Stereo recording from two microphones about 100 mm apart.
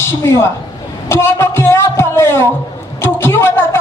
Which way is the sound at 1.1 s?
25° left (ahead or behind).